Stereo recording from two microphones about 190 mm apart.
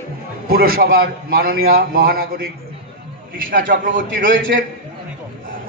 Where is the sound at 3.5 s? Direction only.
45° right (ahead or behind).